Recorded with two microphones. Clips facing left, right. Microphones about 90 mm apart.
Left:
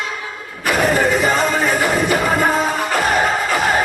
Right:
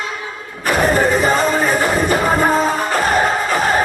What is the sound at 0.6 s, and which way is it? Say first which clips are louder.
Music: right 1 dB; 40° right (ahead or behind).